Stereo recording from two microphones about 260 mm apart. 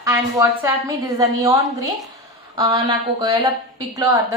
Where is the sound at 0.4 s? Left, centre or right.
Centre.